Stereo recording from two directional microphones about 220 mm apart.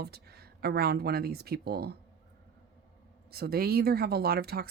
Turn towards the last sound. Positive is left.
turn(degrees=-45)  # may be behind; listen again after turning